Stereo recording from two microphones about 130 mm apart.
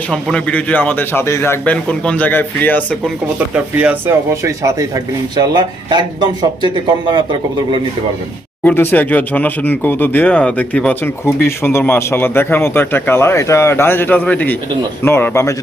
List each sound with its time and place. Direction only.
0.1 s speech: 5° left (ahead or behind)
3.3 s speech: 10° right (ahead or behind)
4.3 s speech: 25° right (ahead or behind)
8.6 s a man's voice: 15° left (ahead or behind)